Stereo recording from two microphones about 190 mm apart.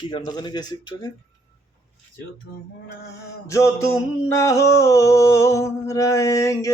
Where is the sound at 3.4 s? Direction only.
15° left (ahead or behind).